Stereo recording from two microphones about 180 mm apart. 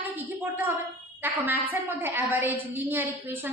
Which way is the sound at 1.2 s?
10° right (ahead or behind).